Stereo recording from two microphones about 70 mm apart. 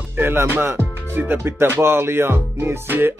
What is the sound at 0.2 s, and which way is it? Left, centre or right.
Speech, right.